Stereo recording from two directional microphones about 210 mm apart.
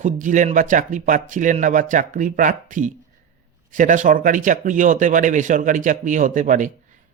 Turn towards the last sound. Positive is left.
turn(degrees=-35)  # may be behind; listen again after turning